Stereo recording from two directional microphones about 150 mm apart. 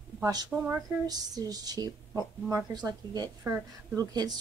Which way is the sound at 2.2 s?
15° right (ahead or behind).